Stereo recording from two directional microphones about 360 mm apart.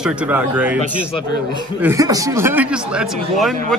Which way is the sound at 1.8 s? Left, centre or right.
Centre.